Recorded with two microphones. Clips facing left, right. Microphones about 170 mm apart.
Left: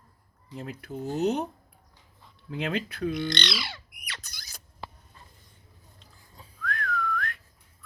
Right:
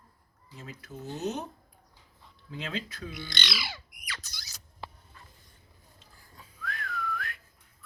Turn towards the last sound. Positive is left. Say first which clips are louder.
# left 5 dB
turn(degrees=-5)  # may be behind; listen again after turning